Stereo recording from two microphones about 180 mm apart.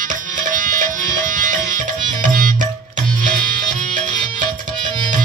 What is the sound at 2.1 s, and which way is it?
Music, 50° right (ahead or behind).